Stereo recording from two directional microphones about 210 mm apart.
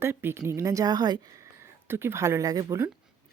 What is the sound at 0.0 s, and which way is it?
A woman's voice, 10° right (ahead or behind).